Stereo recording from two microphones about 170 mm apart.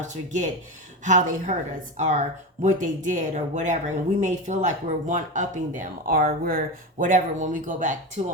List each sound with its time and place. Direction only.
0.0 s speech: 45° right (ahead or behind)
7.0 s speech: 50° right (ahead or behind)